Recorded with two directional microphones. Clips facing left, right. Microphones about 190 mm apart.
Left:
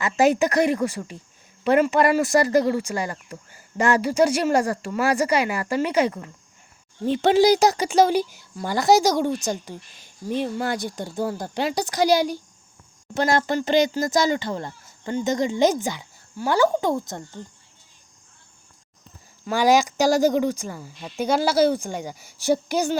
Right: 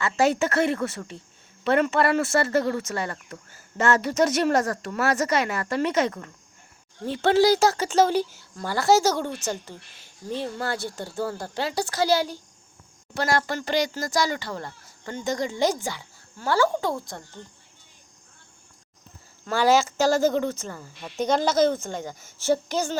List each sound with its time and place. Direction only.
0.0 s speech: 15° left (ahead or behind)
19.5 s speech: 15° left (ahead or behind)